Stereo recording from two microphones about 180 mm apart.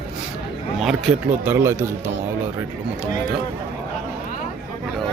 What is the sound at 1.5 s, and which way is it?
Speech, 15° right (ahead or behind).